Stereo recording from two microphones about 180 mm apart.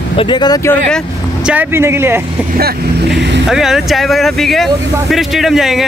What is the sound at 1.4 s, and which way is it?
Speech, 10° right (ahead or behind).